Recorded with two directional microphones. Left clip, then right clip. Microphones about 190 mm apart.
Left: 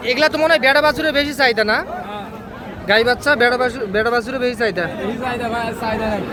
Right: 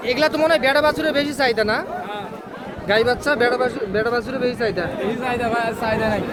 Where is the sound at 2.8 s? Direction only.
Centre (ahead or behind).